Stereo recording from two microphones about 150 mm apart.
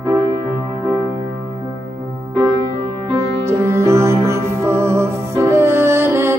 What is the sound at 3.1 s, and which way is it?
Music, 20° right (ahead or behind).